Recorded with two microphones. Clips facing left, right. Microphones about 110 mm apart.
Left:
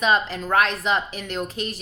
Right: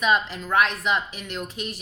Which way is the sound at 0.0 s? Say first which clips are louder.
Left 2 dB; 35° left (ahead or behind).